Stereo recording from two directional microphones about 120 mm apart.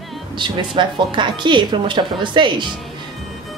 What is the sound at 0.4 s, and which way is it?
Speech, 40° right (ahead or behind).